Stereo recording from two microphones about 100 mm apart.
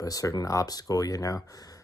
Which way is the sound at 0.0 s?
35° left (ahead or behind).